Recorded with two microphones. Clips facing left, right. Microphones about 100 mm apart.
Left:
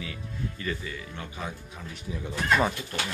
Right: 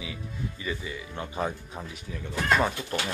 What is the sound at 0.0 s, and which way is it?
Speech, 10° right (ahead or behind).